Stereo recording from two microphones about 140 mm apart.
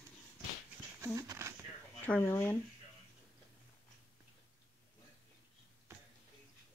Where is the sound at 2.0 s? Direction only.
15° left (ahead or behind).